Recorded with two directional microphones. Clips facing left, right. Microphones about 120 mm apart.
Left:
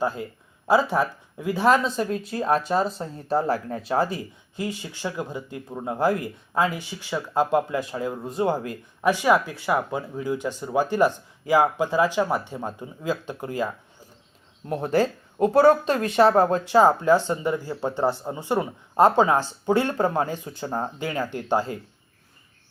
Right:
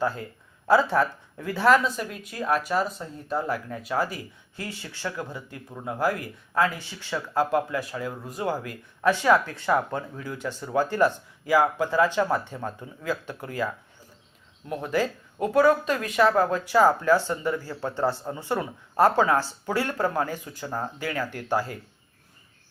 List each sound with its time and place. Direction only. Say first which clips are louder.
0.0 s speech: left 1 dB; 15° left (ahead or behind)
14.7 s speech: left 4 dB; 35° left (ahead or behind)